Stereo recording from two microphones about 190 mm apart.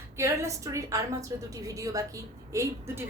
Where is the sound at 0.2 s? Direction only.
15° right (ahead or behind).